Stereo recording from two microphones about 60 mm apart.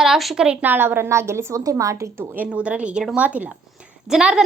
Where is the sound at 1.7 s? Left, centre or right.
Right.